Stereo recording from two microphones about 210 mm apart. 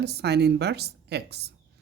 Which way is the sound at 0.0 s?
50° right (ahead or behind).